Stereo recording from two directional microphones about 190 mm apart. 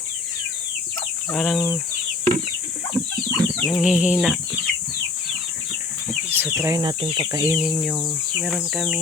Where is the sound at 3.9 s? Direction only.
5° right (ahead or behind).